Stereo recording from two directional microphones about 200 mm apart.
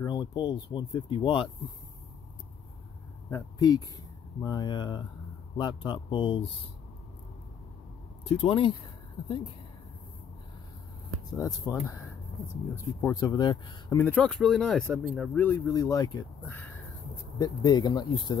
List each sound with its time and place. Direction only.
0.0 s speech: 20° left (ahead or behind)
3.3 s speech: 15° left (ahead or behind)
8.3 s speech: 25° left (ahead or behind)
11.3 s speech: 15° left (ahead or behind)
12.7 s speech: 15° left (ahead or behind)
14.0 s speech: 5° left (ahead or behind); by 18.4 s 20° left (ahead or behind)